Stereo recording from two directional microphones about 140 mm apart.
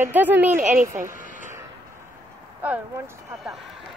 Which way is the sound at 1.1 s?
70° right (ahead or behind).